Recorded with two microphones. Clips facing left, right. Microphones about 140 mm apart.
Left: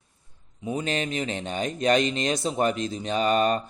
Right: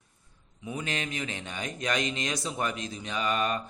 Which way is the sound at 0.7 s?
30° left (ahead or behind).